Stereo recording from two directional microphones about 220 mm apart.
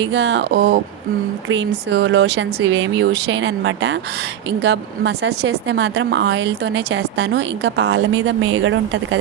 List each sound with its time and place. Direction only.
0.0 s a woman's voice: 55° right (ahead or behind)